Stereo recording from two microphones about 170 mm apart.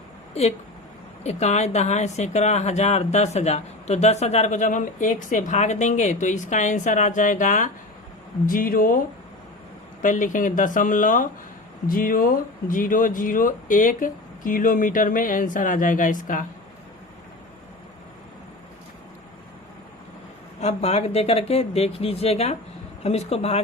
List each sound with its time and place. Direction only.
0.4 s speech: 40° left (ahead or behind); by 9.0 s 55° left (ahead or behind)
10.0 s speech: 50° left (ahead or behind)
20.6 s speech: 35° left (ahead or behind)